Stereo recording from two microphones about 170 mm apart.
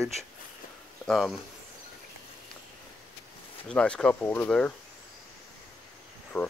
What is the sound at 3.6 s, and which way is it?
Speech, 5° left (ahead or behind).